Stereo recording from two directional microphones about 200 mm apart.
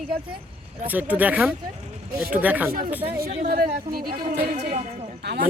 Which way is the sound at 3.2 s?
45° right (ahead or behind).